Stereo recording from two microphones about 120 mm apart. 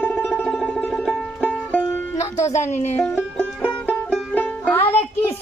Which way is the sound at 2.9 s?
20° left (ahead or behind).